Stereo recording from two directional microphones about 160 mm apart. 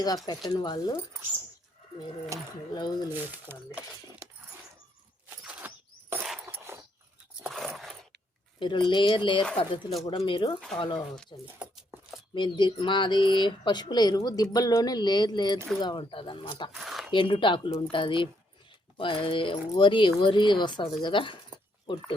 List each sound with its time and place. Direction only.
0.3 s speech: 25° left (ahead or behind)
2.3 s speech: 20° right (ahead or behind)
2.7 s speech: 25° left (ahead or behind)
3.1 s speech: 10° right (ahead or behind)
5.4 s a sound: 10° right (ahead or behind)
6.7 s a sound: 15° right (ahead or behind)
7.4 s biting: centre (ahead or behind)
8.5 s speech: 30° left (ahead or behind)
16.7 s zipper: centre (ahead or behind)
17.1 s speech: 30° left (ahead or behind)